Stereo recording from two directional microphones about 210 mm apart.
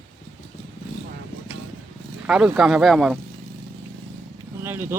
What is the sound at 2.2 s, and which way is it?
Speech, 5° right (ahead or behind).